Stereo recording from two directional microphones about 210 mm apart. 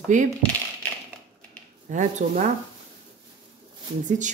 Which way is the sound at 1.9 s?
35° right (ahead or behind).